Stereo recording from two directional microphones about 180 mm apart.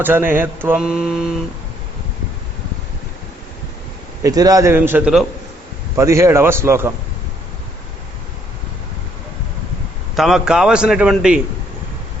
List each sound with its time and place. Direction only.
0.0 s mantra: 10° right (ahead or behind)
4.2 s mantra: 20° right (ahead or behind)
10.2 s a man's voice: centre (ahead or behind)